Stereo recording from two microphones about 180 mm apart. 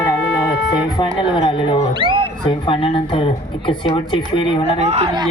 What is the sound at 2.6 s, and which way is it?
Speech, 30° left (ahead or behind).